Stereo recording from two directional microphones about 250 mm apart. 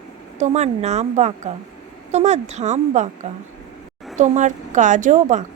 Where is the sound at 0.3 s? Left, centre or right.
Right.